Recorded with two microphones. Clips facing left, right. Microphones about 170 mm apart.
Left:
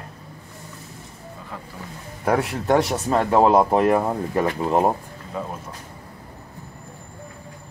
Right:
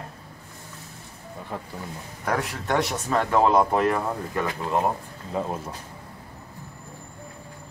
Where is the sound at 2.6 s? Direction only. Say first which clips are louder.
Left 5 dB; 35° left (ahead or behind).